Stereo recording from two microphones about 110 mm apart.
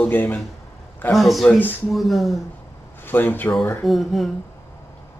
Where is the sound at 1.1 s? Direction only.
Centre (ahead or behind).